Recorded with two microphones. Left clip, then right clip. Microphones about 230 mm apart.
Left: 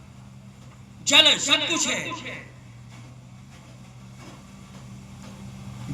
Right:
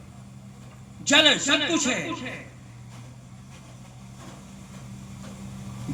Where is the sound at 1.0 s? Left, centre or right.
Left.